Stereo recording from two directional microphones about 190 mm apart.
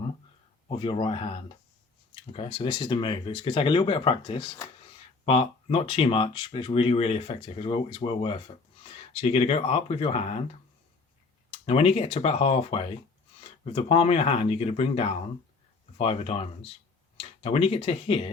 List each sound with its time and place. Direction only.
0.7 s speech: 30° left (ahead or behind)
11.6 s speech: 35° left (ahead or behind)